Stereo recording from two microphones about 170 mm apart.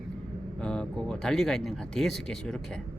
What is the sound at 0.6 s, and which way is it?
Speech, 5° left (ahead or behind).